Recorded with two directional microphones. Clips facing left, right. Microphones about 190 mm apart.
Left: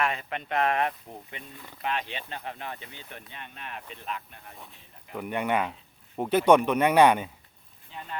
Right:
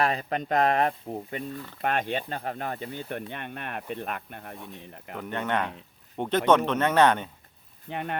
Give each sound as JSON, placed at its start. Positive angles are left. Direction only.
{"t": 0.0, "sound": "speech", "side_deg": -35}
{"t": 5.1, "sound": "speech", "side_deg": 10}
{"t": 7.9, "sound": "speech", "side_deg": -65}